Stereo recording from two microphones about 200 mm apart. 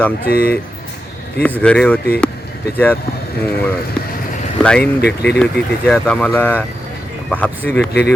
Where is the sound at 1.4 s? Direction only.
5° left (ahead or behind).